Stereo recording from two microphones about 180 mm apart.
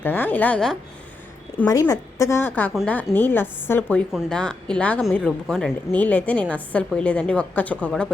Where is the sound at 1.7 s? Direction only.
20° left (ahead or behind).